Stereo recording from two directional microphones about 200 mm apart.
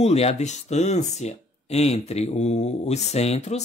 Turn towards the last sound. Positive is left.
turn(degrees=35)  # may be behind; listen again after turning